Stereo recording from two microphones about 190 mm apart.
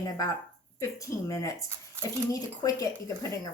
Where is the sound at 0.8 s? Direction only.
15° left (ahead or behind).